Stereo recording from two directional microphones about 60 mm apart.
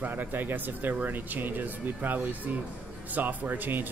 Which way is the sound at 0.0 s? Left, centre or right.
Right.